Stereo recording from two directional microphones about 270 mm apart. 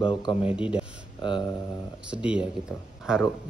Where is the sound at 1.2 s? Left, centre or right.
Centre.